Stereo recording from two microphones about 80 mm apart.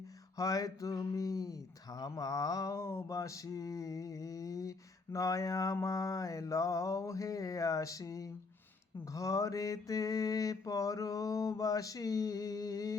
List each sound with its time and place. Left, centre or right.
0.3 s mantra: left
2.7 s mantra: left